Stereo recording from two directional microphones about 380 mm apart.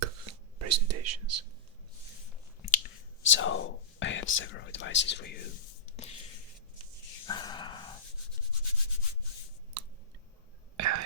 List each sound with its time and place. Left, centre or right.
0.6 s speech: right
3.2 s speech: left
7.3 s a sound: centre
10.8 s whispering: right